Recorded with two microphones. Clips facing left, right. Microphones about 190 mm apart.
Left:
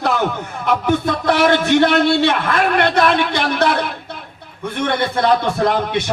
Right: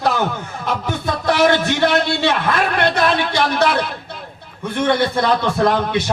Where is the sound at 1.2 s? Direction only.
60° left (ahead or behind).